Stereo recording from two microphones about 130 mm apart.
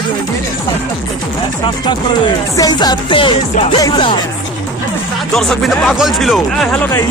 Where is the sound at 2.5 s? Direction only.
30° left (ahead or behind).